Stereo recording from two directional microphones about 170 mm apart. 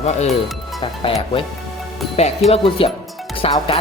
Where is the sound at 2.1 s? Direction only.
40° left (ahead or behind).